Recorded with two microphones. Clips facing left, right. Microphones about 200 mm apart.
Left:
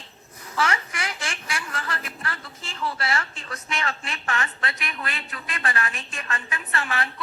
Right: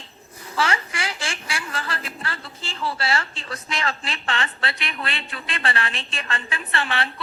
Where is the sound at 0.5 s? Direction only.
30° right (ahead or behind).